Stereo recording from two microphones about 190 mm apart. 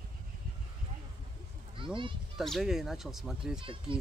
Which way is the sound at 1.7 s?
25° right (ahead or behind).